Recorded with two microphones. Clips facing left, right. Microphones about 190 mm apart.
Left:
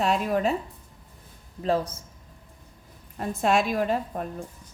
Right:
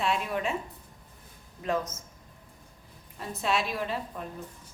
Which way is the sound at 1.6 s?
30° left (ahead or behind).